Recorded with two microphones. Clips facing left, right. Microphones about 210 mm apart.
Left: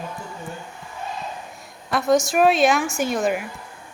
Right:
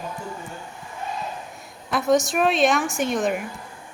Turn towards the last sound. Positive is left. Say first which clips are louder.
# left 1 dB
turn(degrees=0)  # may be behind; listen again after turning